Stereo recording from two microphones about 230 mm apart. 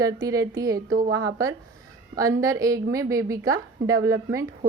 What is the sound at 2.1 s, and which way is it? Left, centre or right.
A woman's voice, centre.